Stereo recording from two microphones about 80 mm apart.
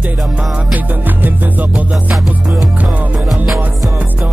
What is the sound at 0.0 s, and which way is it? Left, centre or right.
Music, centre.